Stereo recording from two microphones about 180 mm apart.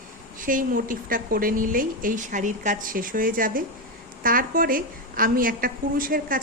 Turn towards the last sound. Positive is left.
turn(degrees=-50)  # may be behind; listen again after turning